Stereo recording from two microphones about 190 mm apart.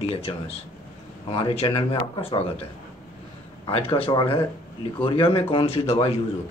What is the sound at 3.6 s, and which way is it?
Speech, 30° left (ahead or behind).